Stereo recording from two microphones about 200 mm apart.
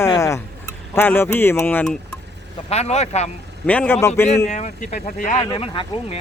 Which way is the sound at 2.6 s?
30° left (ahead or behind).